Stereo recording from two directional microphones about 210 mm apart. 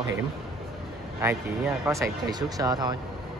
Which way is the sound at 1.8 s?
15° right (ahead or behind).